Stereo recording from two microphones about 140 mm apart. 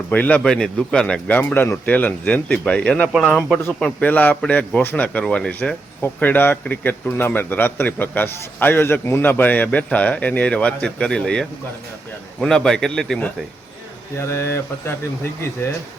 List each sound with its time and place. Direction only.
0.1 s a man's voice: 10° left (ahead or behind)
14.2 s speech: 20° left (ahead or behind)